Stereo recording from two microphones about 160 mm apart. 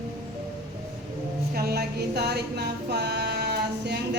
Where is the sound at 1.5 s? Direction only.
80° right.